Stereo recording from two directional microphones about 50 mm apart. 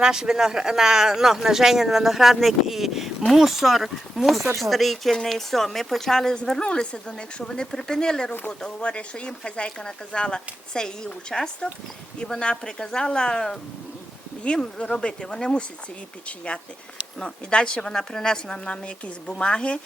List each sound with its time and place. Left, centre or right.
0.0 s speech: centre
8.3 s speech: left
17.2 s speech: centre